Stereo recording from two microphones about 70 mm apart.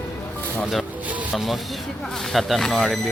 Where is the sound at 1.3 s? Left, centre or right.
Centre.